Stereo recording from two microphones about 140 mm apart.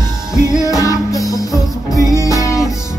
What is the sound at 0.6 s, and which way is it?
Music, 25° left (ahead or behind).